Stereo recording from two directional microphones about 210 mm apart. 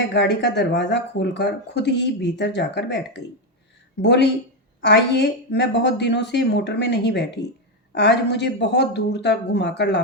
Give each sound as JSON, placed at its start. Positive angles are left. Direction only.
{"t": 0.1, "sound": "speech", "side_deg": 55}